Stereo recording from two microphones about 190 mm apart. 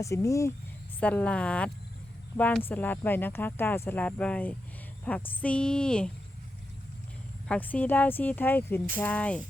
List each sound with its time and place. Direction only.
0.0 s a woman's voice: 15° left (ahead or behind)
7.4 s speech: 5° left (ahead or behind)